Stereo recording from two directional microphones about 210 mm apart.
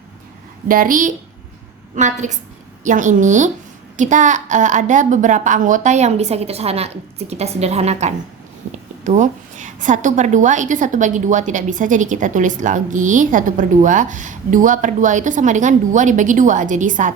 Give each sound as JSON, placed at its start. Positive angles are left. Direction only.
{"t": 0.7, "sound": "a woman's voice", "side_deg": -40}